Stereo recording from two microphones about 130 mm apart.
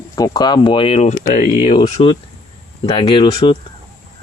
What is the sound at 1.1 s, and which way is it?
Speech, 90° left.